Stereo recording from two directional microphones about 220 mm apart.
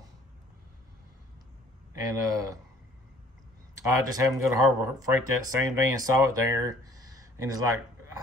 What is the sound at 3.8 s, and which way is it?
Speech, 15° right (ahead or behind).